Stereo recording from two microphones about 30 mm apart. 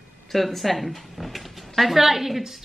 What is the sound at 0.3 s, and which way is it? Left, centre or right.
Speech, centre.